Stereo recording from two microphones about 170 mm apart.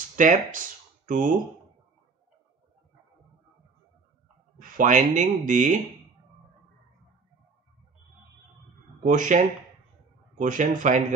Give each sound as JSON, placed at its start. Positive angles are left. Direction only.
{"t": 0.1, "sound": "speech", "side_deg": -50}
{"t": 4.6, "sound": "speech", "side_deg": -50}
{"t": 9.0, "sound": "speech", "side_deg": -50}
{"t": 10.4, "sound": "speech", "side_deg": -50}